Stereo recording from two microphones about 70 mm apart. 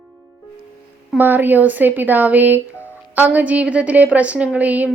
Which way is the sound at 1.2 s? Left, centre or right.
Right.